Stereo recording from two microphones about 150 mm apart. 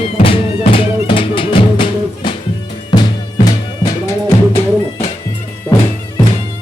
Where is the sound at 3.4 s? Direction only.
25° left (ahead or behind).